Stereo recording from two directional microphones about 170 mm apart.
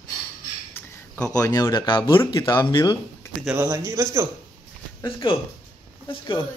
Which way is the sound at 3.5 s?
15° right (ahead or behind).